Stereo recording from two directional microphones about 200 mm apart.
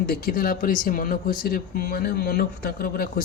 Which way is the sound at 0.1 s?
45° left (ahead or behind).